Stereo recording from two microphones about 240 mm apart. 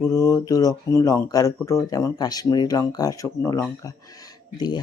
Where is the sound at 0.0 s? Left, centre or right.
Centre.